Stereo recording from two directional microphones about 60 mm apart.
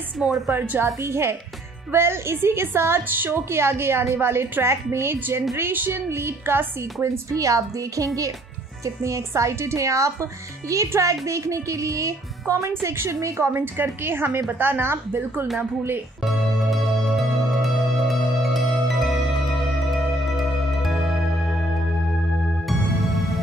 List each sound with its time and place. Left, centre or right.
0.2 s a woman's voice: centre
1.0 s a woman's voice: right
17.6 s music: centre